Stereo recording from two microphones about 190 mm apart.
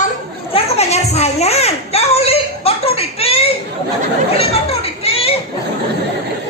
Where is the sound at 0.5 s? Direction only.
35° left (ahead or behind).